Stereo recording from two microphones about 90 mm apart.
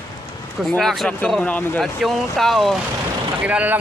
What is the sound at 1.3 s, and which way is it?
Speech, 10° left (ahead or behind).